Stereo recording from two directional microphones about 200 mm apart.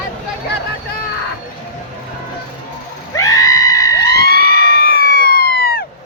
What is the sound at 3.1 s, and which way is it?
Screaming, 15° left (ahead or behind).